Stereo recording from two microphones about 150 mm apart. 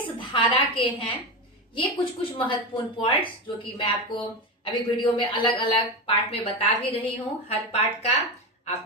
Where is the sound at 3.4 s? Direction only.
35° left (ahead or behind).